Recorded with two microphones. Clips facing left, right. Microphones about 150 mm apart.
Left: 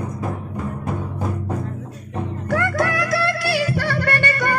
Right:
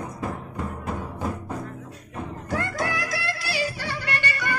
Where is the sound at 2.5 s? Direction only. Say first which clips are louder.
Left 7 dB; 60° left (ahead or behind).